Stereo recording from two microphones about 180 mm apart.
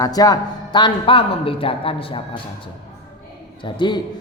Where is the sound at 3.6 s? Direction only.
25° left (ahead or behind).